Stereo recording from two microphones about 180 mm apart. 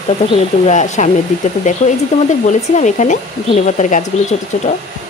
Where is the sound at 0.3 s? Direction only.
40° left (ahead or behind).